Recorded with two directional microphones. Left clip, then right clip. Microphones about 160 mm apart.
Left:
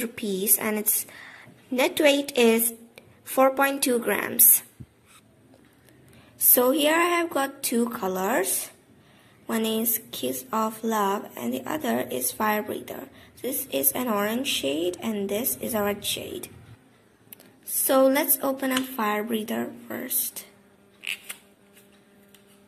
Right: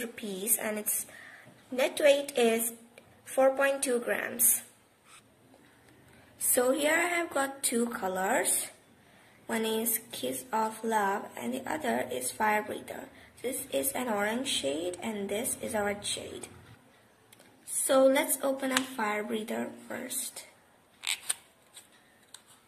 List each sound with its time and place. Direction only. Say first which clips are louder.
0.0 s a woman's voice: left 8 dB; 40° left (ahead or behind)
6.5 s speech: left 5 dB; 25° left (ahead or behind)
9.5 s speech: left 4 dB; 25° left (ahead or behind)
17.8 s speech: left 3 dB; 20° left (ahead or behind)